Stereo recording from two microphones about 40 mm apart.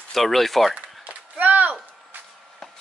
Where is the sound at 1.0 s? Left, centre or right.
Right.